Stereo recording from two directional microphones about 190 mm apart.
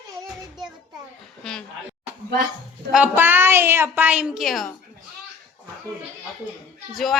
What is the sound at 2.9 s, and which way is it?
A woman's voice, 10° right (ahead or behind).